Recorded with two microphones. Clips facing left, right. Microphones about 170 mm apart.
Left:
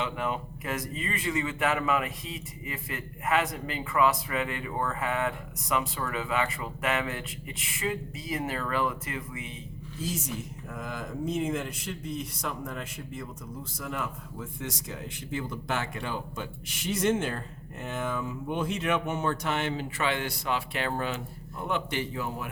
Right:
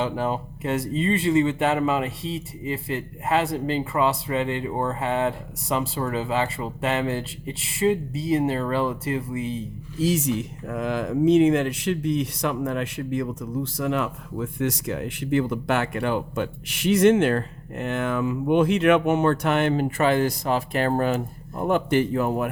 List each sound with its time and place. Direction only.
0.0 s speech: 30° right (ahead or behind)
10.0 s speech: 75° right (ahead or behind); by 22.4 s 55° right (ahead or behind)